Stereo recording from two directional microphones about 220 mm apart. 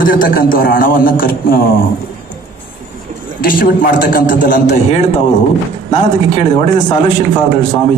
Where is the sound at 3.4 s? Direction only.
40° left (ahead or behind).